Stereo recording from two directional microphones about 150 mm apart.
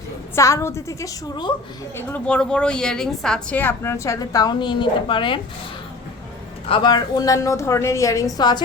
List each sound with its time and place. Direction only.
0.3 s a woman's voice: 20° left (ahead or behind)
2.0 s a woman's voice: 15° left (ahead or behind); by 5.4 s 35° left (ahead or behind)
6.7 s a woman's voice: 30° left (ahead or behind)